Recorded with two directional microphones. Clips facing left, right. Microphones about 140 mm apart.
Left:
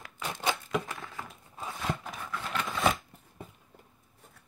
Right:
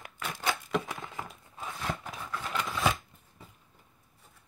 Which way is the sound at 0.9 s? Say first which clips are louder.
Right 2 dB; 20° right (ahead or behind).